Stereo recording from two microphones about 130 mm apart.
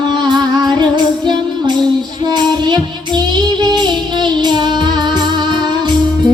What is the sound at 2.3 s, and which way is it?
Child singing, 35° right (ahead or behind).